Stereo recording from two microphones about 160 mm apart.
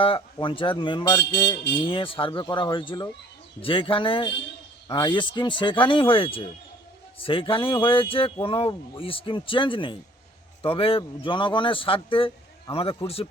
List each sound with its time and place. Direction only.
0.0 s speech: 35° left (ahead or behind)
1.8 s speech: 35° left (ahead or behind)